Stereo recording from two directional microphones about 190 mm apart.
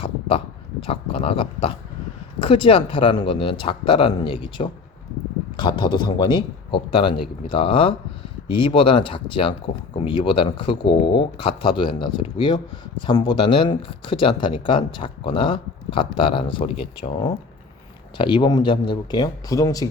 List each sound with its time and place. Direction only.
0.0 s speech: 30° left (ahead or behind)